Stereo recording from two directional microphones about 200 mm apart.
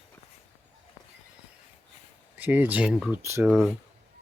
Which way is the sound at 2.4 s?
10° right (ahead or behind).